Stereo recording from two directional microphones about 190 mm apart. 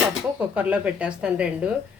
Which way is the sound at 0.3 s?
5° right (ahead or behind).